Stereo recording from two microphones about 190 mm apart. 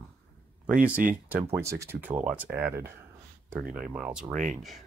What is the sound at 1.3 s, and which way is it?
Speech, 15° right (ahead or behind).